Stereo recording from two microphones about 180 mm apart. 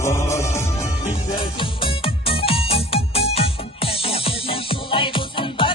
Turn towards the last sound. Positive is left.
turn(degrees=30)  # may be behind; listen again after turning